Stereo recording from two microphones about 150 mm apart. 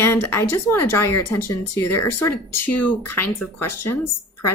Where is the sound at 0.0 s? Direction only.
15° left (ahead or behind).